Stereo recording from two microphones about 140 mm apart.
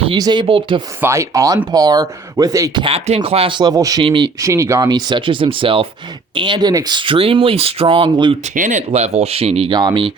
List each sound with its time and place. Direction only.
0.2 s speech: 35° right (ahead or behind)
1.0 s speech: 20° right (ahead or behind)
2.8 s speech: 40° right (ahead or behind)
4.0 s speech: 35° right (ahead or behind)
4.4 s speech: 20° right (ahead or behind); by 8.4 s 40° right (ahead or behind)
8.5 s speech: 70° right (ahead or behind)
8.9 s speech: 50° right (ahead or behind)
9.7 s speech: 35° right (ahead or behind)